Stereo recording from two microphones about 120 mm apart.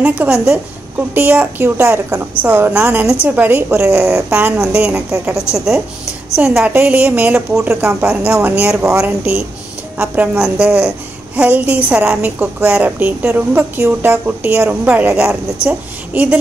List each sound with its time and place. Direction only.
0.0 s a woman's voice: 10° right (ahead or behind)
5.1 s a woman's voice: 25° right (ahead or behind)
6.7 s a woman's voice: 15° right (ahead or behind)
7.8 s a woman's voice: 20° right (ahead or behind)